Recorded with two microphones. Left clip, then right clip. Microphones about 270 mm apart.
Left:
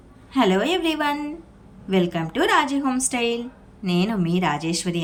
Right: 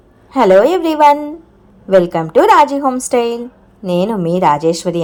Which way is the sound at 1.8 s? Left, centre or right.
Centre.